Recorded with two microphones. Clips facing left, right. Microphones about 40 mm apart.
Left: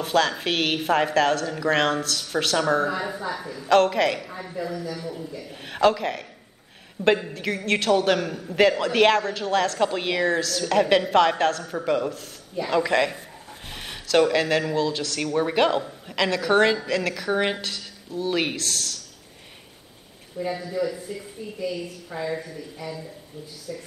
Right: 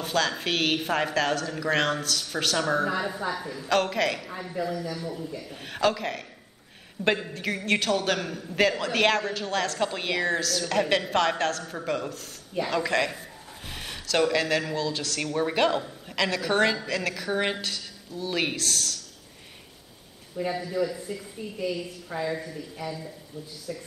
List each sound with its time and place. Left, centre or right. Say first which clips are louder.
0.0 s a woman's voice: left 4 dB; centre
20.3 s a man's voice: left 1 dB; centre
20.6 s a woman's voice: left 1 dB; centre
23.7 s a man's voice: left 1 dB; centre